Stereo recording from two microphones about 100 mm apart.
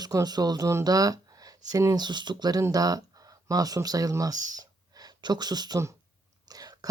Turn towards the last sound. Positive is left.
turn(degrees=-40)  # may be behind; listen again after turning